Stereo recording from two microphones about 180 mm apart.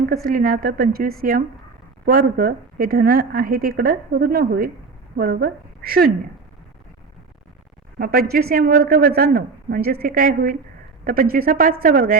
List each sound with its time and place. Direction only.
0.3 s a woman's voice: 50° right (ahead or behind)
7.9 s a woman's voice: 55° right (ahead or behind)